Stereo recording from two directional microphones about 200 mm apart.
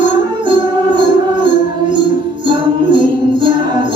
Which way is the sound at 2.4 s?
25° right (ahead or behind).